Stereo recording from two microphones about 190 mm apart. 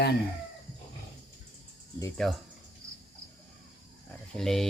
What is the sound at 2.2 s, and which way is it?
Mantra, centre (ahead or behind).